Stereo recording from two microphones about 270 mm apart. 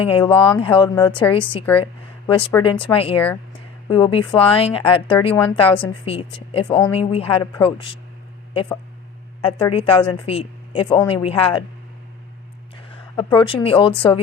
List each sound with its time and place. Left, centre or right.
0.0 s a woman's voice: centre
9.4 s a woman's voice: centre
13.1 s a woman's voice: centre